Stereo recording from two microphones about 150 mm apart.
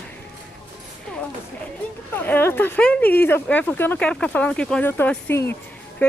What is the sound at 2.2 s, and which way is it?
Speech, 15° left (ahead or behind).